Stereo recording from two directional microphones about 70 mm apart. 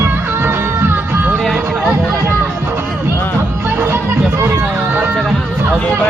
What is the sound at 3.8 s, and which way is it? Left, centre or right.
Music, right.